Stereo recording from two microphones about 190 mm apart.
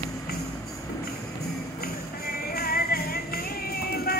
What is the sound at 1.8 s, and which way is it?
Music, 55° left (ahead or behind).